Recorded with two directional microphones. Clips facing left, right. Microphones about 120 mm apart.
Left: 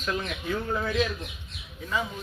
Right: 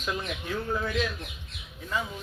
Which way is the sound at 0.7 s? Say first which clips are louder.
Even; centre (ahead or behind).